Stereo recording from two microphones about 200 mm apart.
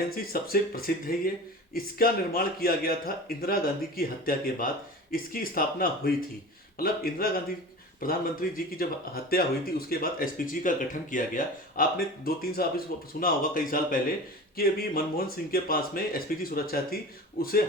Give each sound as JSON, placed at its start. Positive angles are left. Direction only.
{"t": 0.1, "sound": "speech", "side_deg": 50}